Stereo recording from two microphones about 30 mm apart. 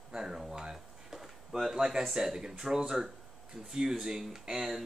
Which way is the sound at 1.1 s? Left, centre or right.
Centre.